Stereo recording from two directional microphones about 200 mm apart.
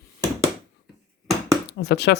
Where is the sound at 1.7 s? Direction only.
55° left (ahead or behind).